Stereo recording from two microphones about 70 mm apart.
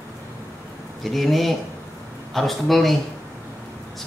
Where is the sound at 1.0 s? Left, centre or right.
Centre.